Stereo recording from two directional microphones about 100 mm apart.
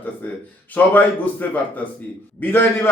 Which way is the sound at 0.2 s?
15° left (ahead or behind).